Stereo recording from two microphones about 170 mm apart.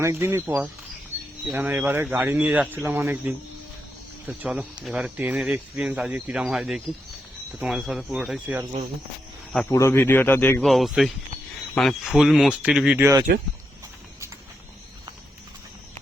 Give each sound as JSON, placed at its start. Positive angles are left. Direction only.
{"t": 0.0, "sound": "speech", "side_deg": -15}
{"t": 9.5, "sound": "a man's voice", "side_deg": 5}
{"t": 10.6, "sound": "speech", "side_deg": 0}
{"t": 13.3, "sound": "speech", "side_deg": -65}